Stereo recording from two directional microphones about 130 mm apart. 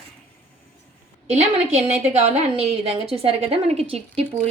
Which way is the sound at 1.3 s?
55° right (ahead or behind).